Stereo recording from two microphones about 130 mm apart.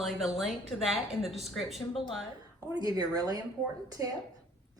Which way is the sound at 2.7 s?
30° right (ahead or behind).